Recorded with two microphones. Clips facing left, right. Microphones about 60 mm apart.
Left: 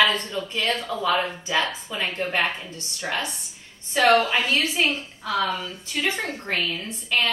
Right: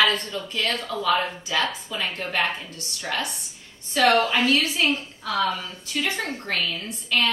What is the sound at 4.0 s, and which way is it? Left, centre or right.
Speech, centre.